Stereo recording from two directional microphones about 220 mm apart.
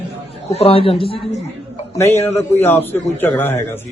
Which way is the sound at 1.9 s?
10° left (ahead or behind).